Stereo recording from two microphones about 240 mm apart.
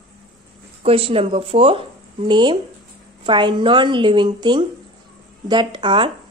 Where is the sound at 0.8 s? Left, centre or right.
Right.